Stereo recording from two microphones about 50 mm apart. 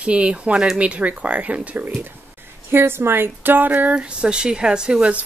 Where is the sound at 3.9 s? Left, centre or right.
Right.